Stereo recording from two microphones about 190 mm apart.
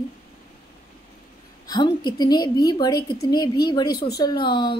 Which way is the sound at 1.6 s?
20° left (ahead or behind).